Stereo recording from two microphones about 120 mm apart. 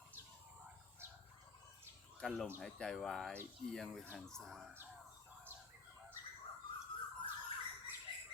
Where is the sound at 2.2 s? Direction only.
5° left (ahead or behind).